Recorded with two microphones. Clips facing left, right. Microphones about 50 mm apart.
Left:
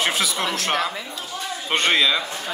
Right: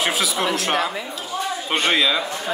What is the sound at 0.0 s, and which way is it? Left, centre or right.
A man's voice, centre.